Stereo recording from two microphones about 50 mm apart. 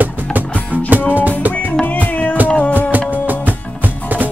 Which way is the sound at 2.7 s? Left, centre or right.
Right.